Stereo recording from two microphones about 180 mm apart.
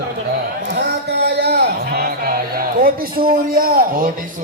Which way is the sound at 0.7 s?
65° right (ahead or behind).